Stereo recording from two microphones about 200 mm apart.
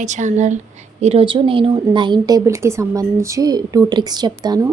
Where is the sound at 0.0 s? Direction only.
40° right (ahead or behind).